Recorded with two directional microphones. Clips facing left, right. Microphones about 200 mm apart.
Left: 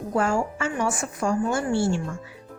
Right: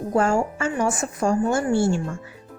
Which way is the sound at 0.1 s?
40° right (ahead or behind).